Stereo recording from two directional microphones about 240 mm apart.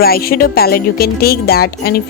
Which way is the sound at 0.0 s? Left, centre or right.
Left.